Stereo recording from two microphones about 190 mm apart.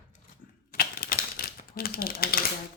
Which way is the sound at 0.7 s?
50° left (ahead or behind).